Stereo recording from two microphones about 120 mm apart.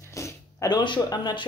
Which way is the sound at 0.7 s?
40° left (ahead or behind).